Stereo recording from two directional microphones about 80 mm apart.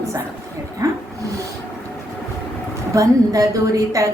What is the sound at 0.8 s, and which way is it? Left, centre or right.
Speech, right.